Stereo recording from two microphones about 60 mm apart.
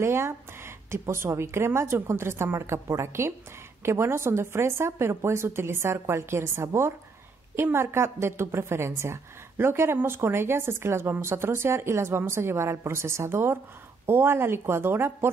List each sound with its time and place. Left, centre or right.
0.0 s a woman's voice: right